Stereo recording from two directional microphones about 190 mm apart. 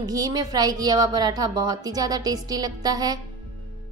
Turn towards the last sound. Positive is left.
turn(degrees=-20)  # may be behind; listen again after turning